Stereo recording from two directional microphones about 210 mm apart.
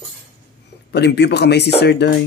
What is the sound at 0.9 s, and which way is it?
Speech, 50° left (ahead or behind).